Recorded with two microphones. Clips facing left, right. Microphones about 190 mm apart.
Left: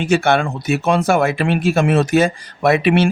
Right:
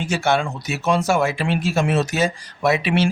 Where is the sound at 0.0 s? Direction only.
60° left (ahead or behind).